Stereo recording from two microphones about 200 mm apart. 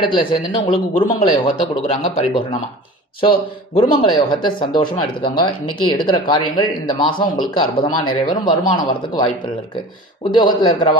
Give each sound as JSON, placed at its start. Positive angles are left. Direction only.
{"t": 0.0, "sound": "speech", "side_deg": 25}
{"t": 10.3, "sound": "speech", "side_deg": 25}